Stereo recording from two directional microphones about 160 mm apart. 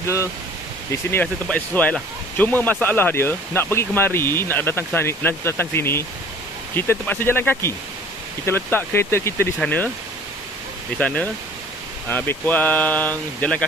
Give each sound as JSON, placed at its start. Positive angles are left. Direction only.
{"t": 0.0, "sound": "speech", "side_deg": 20}
{"t": 11.0, "sound": "speech", "side_deg": 10}